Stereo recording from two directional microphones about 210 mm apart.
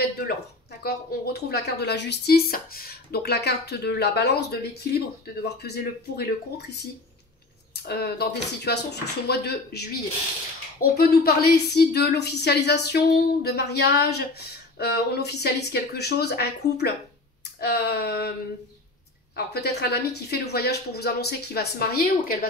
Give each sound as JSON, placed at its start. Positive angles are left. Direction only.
{"t": 0.8, "sound": "speech", "side_deg": 50}
{"t": 7.7, "sound": "speech", "side_deg": 55}
{"t": 19.3, "sound": "speech", "side_deg": 50}